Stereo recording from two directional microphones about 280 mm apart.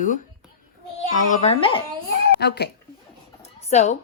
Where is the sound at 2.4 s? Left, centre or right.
Left.